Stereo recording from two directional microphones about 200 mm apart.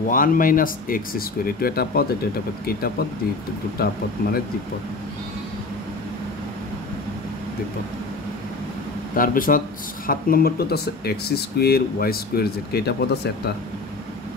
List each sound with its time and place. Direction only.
0.1 s speech: 45° left (ahead or behind)
3.7 s speech: 50° left (ahead or behind)
9.1 s speech: 45° left (ahead or behind)